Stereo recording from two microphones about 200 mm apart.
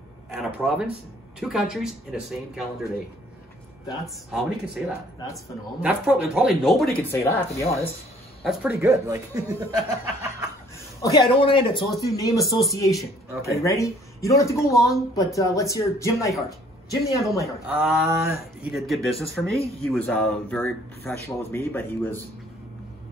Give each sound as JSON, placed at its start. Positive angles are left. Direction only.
{"t": 0.4, "sound": "speech", "side_deg": -5}
{"t": 4.0, "sound": "speech", "side_deg": 0}
{"t": 7.1, "sound": "speech", "side_deg": 15}
{"t": 8.5, "sound": "speech", "side_deg": -10}
{"t": 11.0, "sound": "speech", "side_deg": 20}
{"t": 17.6, "sound": "speech", "side_deg": -5}
{"t": 18.1, "sound": "speech", "side_deg": -15}
{"t": 18.7, "sound": "speech", "side_deg": 0}